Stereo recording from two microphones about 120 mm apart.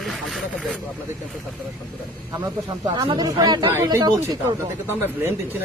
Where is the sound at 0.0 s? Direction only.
Centre (ahead or behind).